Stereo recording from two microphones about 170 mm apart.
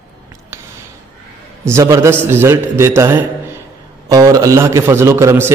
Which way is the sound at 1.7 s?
15° right (ahead or behind).